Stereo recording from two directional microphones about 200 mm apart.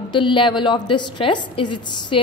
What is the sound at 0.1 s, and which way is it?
A woman's voice, 25° left (ahead or behind).